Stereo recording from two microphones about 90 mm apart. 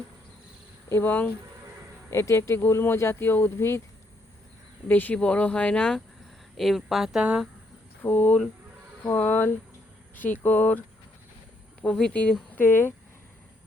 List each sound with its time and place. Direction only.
0.9 s speech: 30° left (ahead or behind)
4.9 s speech: 20° left (ahead or behind)
6.6 s speech: centre (ahead or behind)
8.0 s speech: 20° left (ahead or behind)
11.8 s speech: 5° left (ahead or behind)
12.5 s speech: 25° left (ahead or behind)